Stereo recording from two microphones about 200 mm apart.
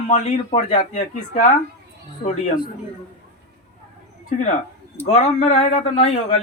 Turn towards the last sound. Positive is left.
turn(degrees=35)  # may be behind; listen again after turning